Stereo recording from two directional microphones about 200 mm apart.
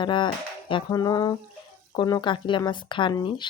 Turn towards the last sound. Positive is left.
turn(degrees=25)  # may be behind; listen again after turning